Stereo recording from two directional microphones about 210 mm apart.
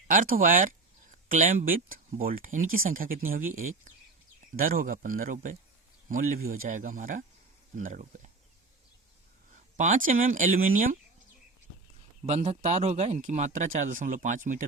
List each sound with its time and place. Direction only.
0.1 s speech: 40° right (ahead or behind)
9.7 s speech: 35° right (ahead or behind)
12.2 s speech: 30° right (ahead or behind)